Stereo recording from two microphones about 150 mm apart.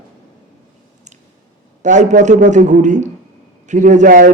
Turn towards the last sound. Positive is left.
turn(degrees=-65)  # may be behind; listen again after turning